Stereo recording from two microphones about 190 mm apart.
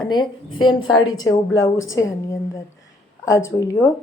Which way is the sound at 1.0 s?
90° left.